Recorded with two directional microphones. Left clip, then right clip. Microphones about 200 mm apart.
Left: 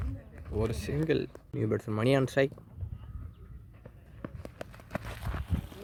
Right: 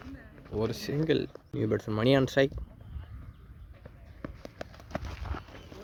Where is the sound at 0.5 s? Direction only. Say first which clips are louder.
Right 1 dB; 10° right (ahead or behind).